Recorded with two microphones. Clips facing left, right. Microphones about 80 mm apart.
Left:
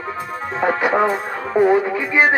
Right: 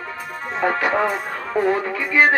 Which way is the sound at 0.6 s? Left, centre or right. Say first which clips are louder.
Left 2 dB; centre.